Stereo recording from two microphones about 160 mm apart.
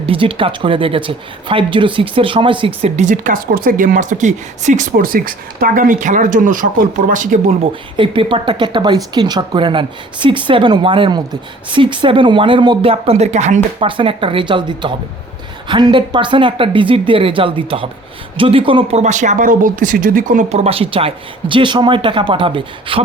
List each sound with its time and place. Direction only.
0.0 s speech: 35° right (ahead or behind); by 7.5 s 55° right (ahead or behind)
7.6 s speech: 30° right (ahead or behind)
13.7 s speech: 35° right (ahead or behind); by 20.4 s 55° right (ahead or behind)
20.5 s speech: 40° right (ahead or behind)